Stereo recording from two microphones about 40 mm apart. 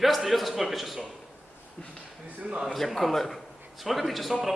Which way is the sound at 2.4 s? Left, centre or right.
Right.